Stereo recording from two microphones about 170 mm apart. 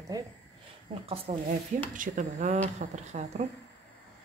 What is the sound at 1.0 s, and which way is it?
Speech, 35° right (ahead or behind).